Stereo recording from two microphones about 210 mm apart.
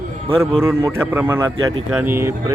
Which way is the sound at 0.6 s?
10° right (ahead or behind).